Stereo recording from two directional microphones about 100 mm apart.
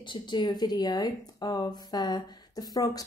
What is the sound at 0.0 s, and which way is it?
Speech, 50° left (ahead or behind).